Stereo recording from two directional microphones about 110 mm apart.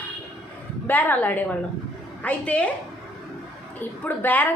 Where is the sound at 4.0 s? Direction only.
15° left (ahead or behind).